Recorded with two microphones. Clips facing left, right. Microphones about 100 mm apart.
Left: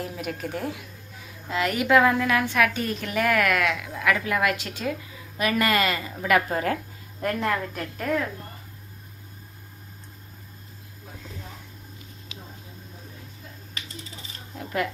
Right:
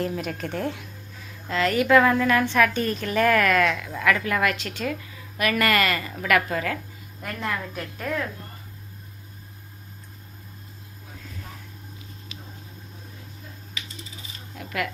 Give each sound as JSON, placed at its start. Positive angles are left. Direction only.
{"t": 0.0, "sound": "a woman's voice", "side_deg": 5}
{"t": 7.2, "sound": "speech", "side_deg": 5}
{"t": 14.5, "sound": "a sound", "side_deg": 25}